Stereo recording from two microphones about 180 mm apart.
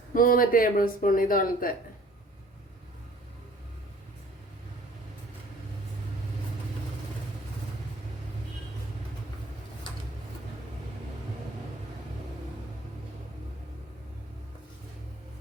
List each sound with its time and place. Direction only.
0.1 s speech: 50° left (ahead or behind)